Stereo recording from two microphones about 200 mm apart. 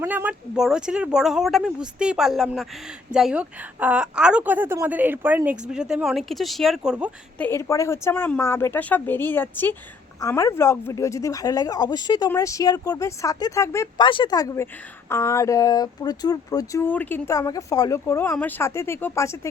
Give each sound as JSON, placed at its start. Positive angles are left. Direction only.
{"t": 0.0, "sound": "a woman's voice", "side_deg": -10}
{"t": 7.3, "sound": "speech", "side_deg": 10}